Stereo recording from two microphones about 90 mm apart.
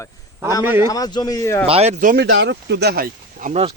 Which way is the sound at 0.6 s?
25° right (ahead or behind).